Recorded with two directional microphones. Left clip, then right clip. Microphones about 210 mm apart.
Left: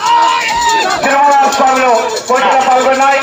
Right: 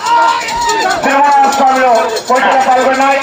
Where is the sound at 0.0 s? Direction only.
45° left (ahead or behind).